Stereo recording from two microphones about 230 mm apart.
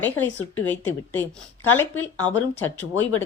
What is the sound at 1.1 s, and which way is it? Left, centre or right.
Speech, centre.